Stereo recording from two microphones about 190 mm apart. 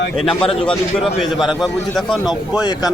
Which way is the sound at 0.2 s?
5° left (ahead or behind).